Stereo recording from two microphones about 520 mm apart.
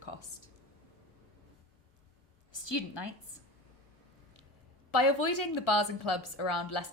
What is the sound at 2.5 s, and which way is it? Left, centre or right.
Speech, left.